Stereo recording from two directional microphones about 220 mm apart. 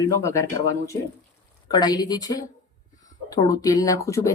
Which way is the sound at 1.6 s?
20° left (ahead or behind).